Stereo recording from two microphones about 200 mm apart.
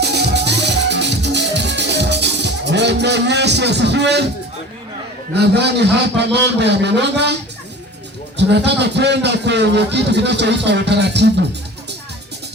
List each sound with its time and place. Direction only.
0.0 s music: 55° right (ahead or behind)
5.3 s a man's voice: 55° right (ahead or behind)
8.4 s a man's voice: 60° right (ahead or behind)